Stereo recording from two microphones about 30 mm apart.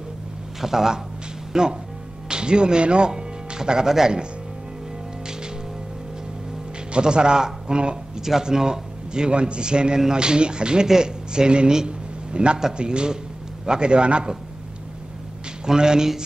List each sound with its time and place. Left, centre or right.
0.6 s speech: centre; by 3.1 s right
3.1 s music: right
6.9 s speech: right
8.3 s a man's voice: centre
9.3 s speech: right
11.7 s a sound: right
12.7 s speech: right
15.6 s speech: right